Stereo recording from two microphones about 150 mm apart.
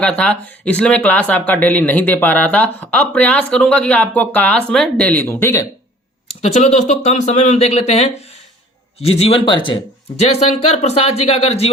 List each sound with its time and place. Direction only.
0.0 s speech: 5° left (ahead or behind)
6.4 s a man's voice: 50° left (ahead or behind)